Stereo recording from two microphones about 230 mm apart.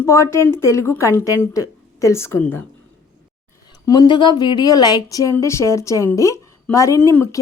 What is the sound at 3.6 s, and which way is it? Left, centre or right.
Speech, centre.